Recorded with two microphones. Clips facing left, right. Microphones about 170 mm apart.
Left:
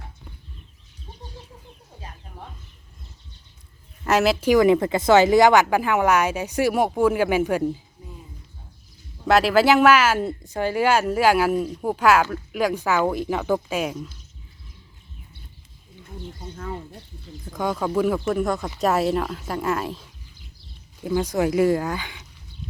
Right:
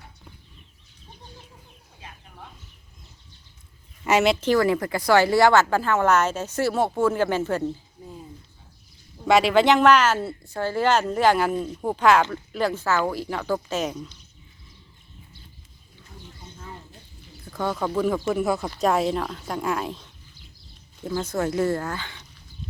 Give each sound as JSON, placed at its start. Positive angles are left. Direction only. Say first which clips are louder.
{"t": 4.0, "sound": "speech", "louder": "left 1 dB", "side_deg": 0}
{"t": 8.0, "sound": "a sound", "louder": "right 2 dB", "side_deg": -25}
{"t": 9.2, "sound": "speech", "louder": "left 1 dB", "side_deg": 0}
{"t": 16.6, "sound": "a sound", "louder": "left 9 dB", "side_deg": 70}
{"t": 17.4, "sound": "speech", "louder": "left 1 dB", "side_deg": 10}
{"t": 21.0, "sound": "speech", "louder": "left 4 dB", "side_deg": 15}